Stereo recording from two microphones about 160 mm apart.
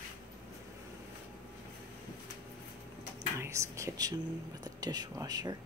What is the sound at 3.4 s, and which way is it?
Speech, 20° right (ahead or behind).